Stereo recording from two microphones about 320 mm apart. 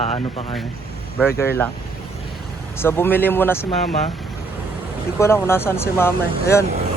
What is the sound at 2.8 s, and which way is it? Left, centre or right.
Speech, centre.